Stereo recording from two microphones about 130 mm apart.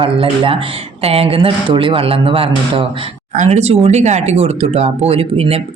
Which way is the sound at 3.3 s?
60° right (ahead or behind).